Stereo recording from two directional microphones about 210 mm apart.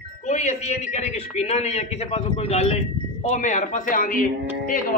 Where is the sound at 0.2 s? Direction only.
30° left (ahead or behind).